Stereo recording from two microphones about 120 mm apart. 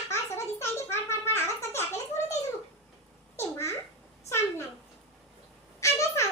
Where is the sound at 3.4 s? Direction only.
25° left (ahead or behind).